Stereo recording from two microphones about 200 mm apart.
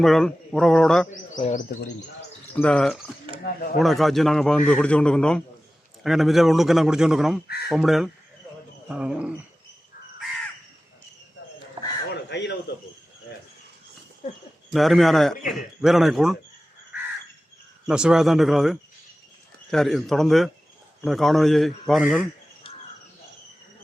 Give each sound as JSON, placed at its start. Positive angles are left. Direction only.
{"t": 0.0, "sound": "a man's voice", "side_deg": 0}
{"t": 1.5, "sound": "speech", "side_deg": 40}
{"t": 2.5, "sound": "a man's voice", "side_deg": 5}
{"t": 7.4, "sound": "speech", "side_deg": 50}
{"t": 7.7, "sound": "a man's voice", "side_deg": 0}
{"t": 11.8, "sound": "a sound", "side_deg": -20}
{"t": 12.1, "sound": "a sound", "side_deg": 60}
{"t": 14.7, "sound": "a man's voice", "side_deg": 0}
{"t": 17.8, "sound": "a man's voice", "side_deg": -5}
{"t": 22.6, "sound": "crow", "side_deg": 25}